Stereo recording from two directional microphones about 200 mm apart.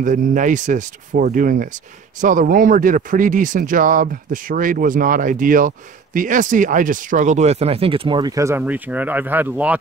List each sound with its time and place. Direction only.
0.0 s speech: 40° right (ahead or behind); by 9.8 s 5° right (ahead or behind)